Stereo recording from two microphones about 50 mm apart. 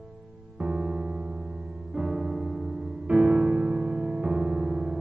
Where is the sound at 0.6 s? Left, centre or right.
Right.